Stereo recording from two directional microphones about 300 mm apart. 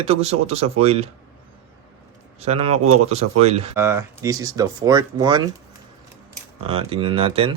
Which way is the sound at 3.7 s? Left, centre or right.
Centre.